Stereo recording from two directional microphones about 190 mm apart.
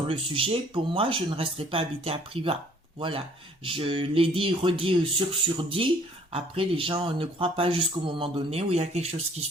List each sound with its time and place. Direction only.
0.1 s speech: 30° right (ahead or behind)